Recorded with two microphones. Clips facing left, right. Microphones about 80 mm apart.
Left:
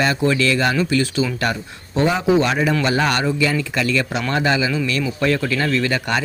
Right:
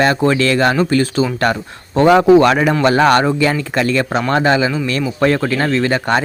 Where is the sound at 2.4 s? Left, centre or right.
Right.